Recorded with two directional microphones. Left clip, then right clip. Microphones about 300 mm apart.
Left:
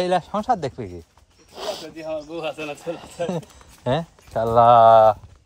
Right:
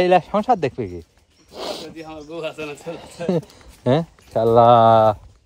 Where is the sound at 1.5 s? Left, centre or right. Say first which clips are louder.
Right 1 dB; right.